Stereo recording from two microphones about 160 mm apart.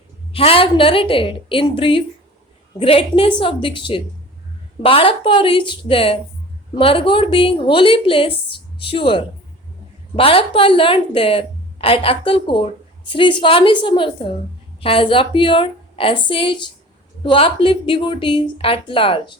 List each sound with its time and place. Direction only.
0.3 s speech: 35° left (ahead or behind)